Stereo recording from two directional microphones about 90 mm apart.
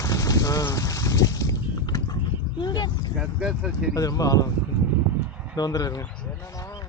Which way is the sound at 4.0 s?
40° left (ahead or behind).